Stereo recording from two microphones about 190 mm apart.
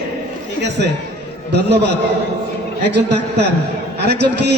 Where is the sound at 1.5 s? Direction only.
60° right (ahead or behind).